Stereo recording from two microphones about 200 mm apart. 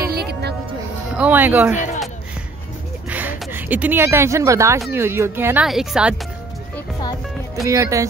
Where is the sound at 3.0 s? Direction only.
10° right (ahead or behind).